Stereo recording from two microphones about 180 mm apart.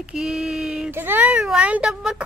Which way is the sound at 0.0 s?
5° right (ahead or behind).